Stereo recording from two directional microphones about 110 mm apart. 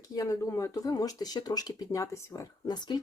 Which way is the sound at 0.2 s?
30° left (ahead or behind).